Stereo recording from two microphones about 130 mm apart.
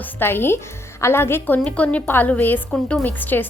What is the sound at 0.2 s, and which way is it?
A woman's voice, 20° left (ahead or behind).